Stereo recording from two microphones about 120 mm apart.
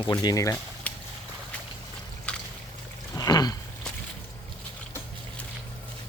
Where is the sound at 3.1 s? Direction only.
30° left (ahead or behind).